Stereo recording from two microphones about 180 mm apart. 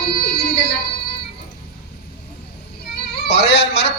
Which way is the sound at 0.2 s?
70° left (ahead or behind).